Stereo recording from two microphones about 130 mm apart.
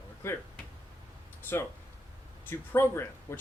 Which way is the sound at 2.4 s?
20° left (ahead or behind).